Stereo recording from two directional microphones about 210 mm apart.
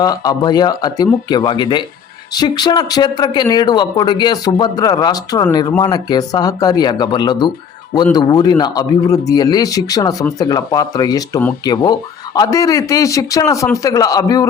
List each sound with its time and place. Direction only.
0.0 s speech: 15° left (ahead or behind)